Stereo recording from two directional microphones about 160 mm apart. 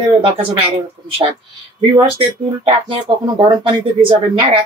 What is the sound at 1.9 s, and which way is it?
Speech, 35° right (ahead or behind).